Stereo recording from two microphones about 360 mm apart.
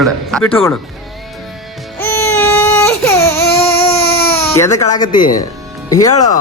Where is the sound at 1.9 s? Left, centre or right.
Centre.